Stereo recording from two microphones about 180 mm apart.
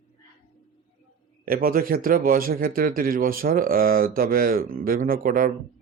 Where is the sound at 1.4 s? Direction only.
55° right (ahead or behind).